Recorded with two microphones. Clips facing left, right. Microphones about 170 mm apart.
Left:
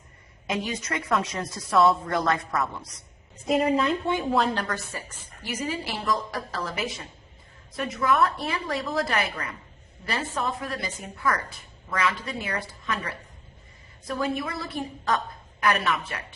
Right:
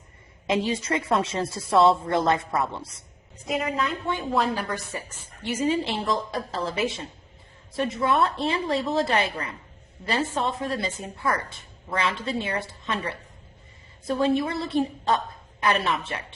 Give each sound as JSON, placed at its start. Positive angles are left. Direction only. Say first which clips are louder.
{"t": 0.4, "sound": "a woman's voice", "louder": "right 5 dB", "side_deg": -30}
{"t": 3.5, "sound": "a woman's voice", "louder": "left 5 dB", "side_deg": 35}
{"t": 4.5, "sound": "a woman's voice", "louder": "right 1 dB", "side_deg": -15}